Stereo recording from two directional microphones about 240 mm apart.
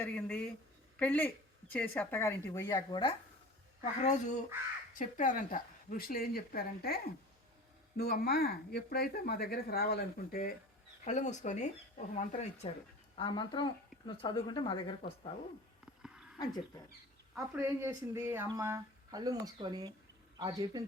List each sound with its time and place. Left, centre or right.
0.0 s speech: centre
3.8 s speech: left
13.1 s speech: centre
16.4 s speech: centre
17.3 s a woman's voice: centre